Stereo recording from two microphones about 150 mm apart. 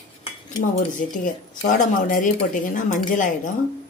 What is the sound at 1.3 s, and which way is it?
Speech, 60° left (ahead or behind).